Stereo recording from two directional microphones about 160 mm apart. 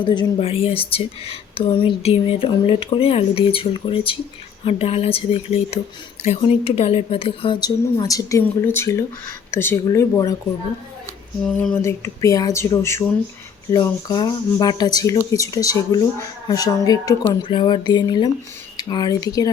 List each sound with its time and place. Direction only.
0.0 s speech: 30° left (ahead or behind)
11.8 s speech: 15° left (ahead or behind)